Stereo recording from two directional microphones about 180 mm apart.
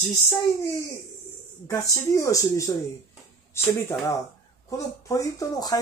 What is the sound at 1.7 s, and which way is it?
Speech, 15° left (ahead or behind).